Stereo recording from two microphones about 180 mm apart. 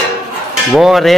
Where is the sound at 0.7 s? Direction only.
Centre (ahead or behind).